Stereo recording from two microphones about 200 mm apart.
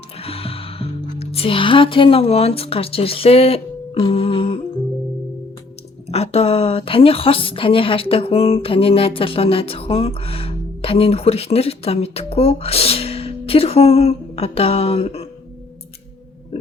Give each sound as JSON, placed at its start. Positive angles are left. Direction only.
{"t": 0.2, "sound": "speech", "side_deg": 30}
{"t": 6.1, "sound": "a woman's voice", "side_deg": 30}